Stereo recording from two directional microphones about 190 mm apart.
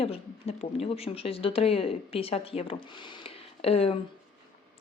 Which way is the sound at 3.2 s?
30° left (ahead or behind).